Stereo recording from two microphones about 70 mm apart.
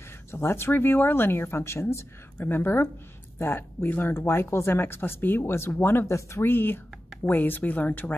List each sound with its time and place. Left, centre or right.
0.3 s speech: left